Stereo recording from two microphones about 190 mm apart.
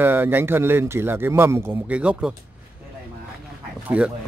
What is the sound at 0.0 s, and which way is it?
A man's voice, 10° right (ahead or behind).